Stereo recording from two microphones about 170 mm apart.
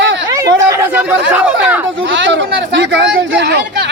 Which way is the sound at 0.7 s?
15° right (ahead or behind).